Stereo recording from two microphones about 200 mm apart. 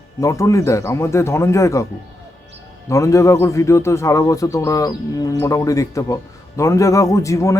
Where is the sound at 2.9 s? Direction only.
15° left (ahead or behind).